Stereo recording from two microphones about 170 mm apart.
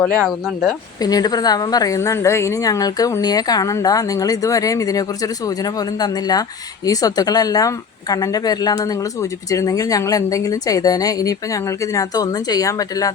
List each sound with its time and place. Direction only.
0.0 s speech: centre (ahead or behind)
1.0 s a woman's voice: 25° left (ahead or behind)